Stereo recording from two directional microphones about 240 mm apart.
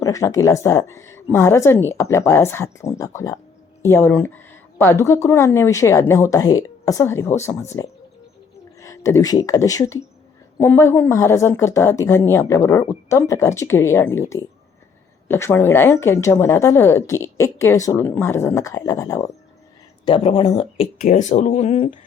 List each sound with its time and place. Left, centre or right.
0.0 s speech: centre
20.1 s speech: left